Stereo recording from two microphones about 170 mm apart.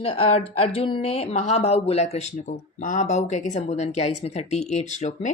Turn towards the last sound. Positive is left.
turn(degrees=45)  # may be behind; listen again after turning